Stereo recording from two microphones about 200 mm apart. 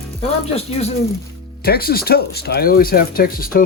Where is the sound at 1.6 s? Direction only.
50° left (ahead or behind).